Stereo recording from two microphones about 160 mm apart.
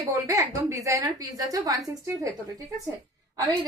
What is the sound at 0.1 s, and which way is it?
A woman's voice, 20° right (ahead or behind).